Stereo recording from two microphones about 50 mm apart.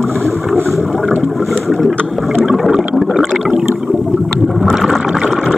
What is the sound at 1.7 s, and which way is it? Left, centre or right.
Vehicle, centre.